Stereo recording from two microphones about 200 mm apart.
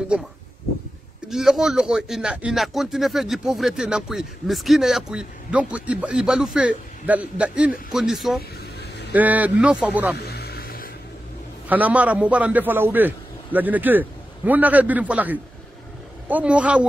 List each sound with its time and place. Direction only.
1.3 s a man's voice: centre (ahead or behind)
10.1 s music: 55° left (ahead or behind)
11.7 s a man's voice: 5° right (ahead or behind)